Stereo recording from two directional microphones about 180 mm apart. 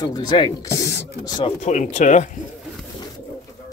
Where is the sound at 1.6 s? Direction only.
40° left (ahead or behind).